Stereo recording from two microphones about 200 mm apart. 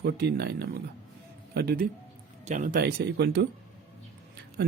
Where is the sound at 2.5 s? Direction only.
40° right (ahead or behind).